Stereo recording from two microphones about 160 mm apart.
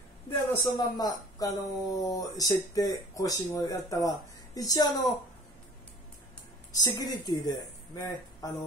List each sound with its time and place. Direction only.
0.5 s speech: 20° left (ahead or behind)
6.7 s a woman's voice: 25° left (ahead or behind)